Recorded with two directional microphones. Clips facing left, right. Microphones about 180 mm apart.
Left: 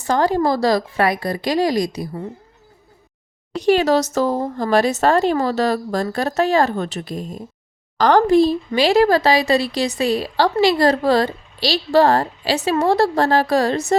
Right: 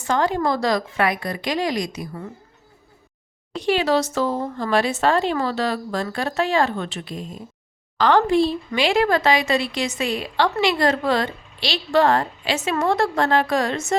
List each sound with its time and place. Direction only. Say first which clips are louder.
0.0 s speech: left 4 dB; 35° left (ahead or behind)
3.6 s speech: left 4 dB; 45° left (ahead or behind)